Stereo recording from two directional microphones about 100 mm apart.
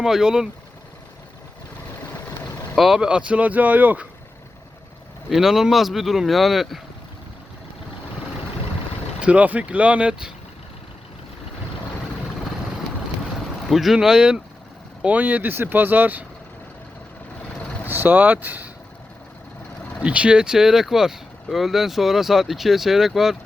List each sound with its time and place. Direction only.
0.0 s speech: 5° right (ahead or behind)
2.4 s vehicle: 40° left (ahead or behind)
2.7 s speech: 5° right (ahead or behind)
5.3 s speech: 5° right (ahead or behind)
9.2 s speech: 15° right (ahead or behind)
13.7 s speech: 5° right (ahead or behind); by 16.2 s 20° right (ahead or behind)
17.8 s speech: 20° right (ahead or behind)
20.0 s speech: 10° right (ahead or behind)